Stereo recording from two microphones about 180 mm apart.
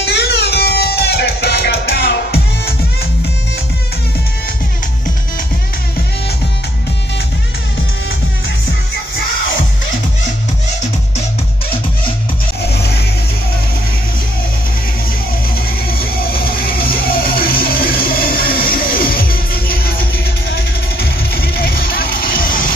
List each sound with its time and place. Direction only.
0.0 s music: 65° left (ahead or behind)
15.9 s music: 55° left (ahead or behind)